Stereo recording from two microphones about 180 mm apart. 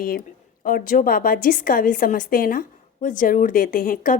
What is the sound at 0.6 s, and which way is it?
A woman's voice, 50° left (ahead or behind).